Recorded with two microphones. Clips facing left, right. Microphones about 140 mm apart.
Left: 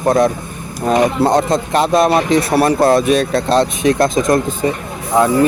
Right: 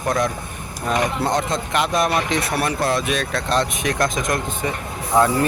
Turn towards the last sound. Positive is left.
turn(degrees=20)  # may be behind; listen again after turning